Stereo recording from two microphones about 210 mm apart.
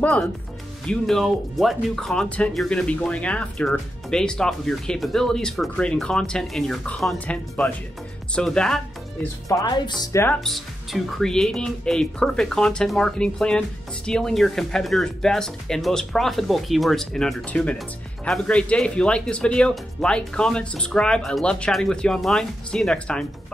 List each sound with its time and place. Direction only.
0.0 s speech: 5° left (ahead or behind)
9.5 s speech: 20° left (ahead or behind)
10.4 s speech: centre (ahead or behind)